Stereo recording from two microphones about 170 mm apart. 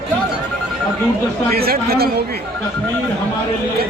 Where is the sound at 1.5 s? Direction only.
65° right (ahead or behind).